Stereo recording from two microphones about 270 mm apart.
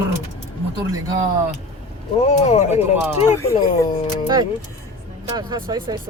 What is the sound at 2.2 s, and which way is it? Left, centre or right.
Speech, left.